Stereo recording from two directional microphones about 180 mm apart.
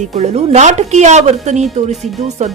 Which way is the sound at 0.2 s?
40° right (ahead or behind).